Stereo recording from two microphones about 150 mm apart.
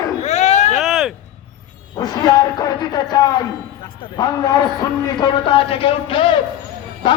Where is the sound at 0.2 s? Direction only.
50° left (ahead or behind).